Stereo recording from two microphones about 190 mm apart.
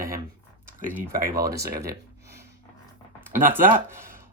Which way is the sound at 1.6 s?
55° right (ahead or behind).